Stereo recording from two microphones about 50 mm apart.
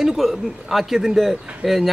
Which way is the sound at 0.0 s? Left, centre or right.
Centre.